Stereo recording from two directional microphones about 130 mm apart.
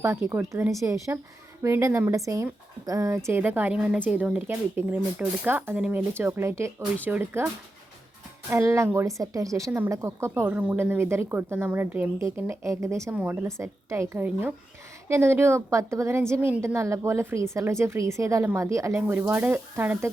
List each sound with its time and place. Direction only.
0.0 s a woman's voice: 20° right (ahead or behind)